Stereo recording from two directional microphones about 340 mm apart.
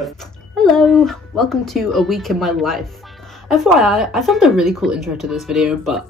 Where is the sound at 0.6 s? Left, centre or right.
Centre.